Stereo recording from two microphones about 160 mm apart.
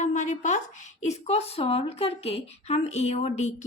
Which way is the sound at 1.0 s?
45° left (ahead or behind).